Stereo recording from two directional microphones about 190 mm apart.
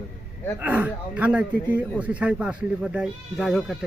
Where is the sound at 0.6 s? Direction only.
10° right (ahead or behind).